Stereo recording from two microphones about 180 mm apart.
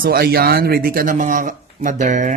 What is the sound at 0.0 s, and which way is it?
Speech, 55° right (ahead or behind).